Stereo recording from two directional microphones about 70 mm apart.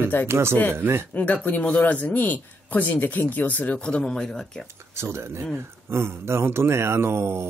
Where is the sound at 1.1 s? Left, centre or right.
Left.